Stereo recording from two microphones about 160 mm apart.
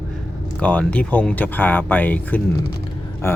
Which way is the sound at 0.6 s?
10° left (ahead or behind).